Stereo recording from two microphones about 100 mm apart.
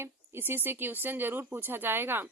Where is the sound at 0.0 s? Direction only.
20° right (ahead or behind).